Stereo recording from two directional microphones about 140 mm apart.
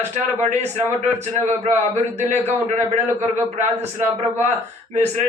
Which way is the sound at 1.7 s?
55° right (ahead or behind).